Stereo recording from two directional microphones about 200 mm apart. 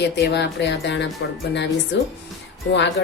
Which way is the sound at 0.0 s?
55° left (ahead or behind).